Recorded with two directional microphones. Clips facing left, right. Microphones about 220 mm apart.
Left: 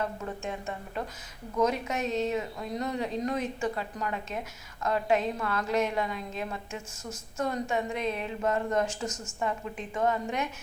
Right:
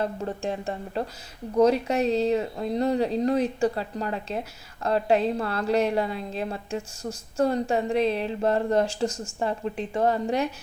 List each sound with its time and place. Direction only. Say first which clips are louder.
0.0 s speech: right 5 dB; 30° right (ahead or behind)